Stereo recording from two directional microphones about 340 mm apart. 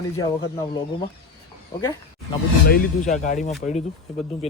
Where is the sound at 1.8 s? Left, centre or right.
Centre.